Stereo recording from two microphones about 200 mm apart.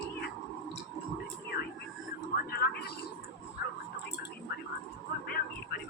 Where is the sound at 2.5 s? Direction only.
50° left (ahead or behind).